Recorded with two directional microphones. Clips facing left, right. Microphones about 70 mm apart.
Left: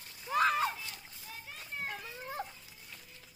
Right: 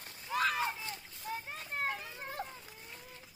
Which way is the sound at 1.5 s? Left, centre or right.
Right.